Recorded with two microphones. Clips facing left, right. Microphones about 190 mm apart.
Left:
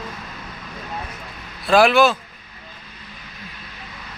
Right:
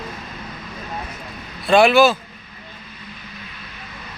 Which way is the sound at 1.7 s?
Centre (ahead or behind).